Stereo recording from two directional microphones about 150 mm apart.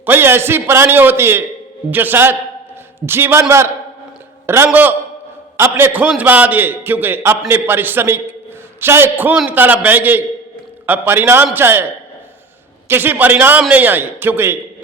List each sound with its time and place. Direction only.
0.0 s a man's voice: 15° right (ahead or behind)
4.4 s a man's voice: 15° right (ahead or behind)
12.9 s a man's voice: 15° right (ahead or behind)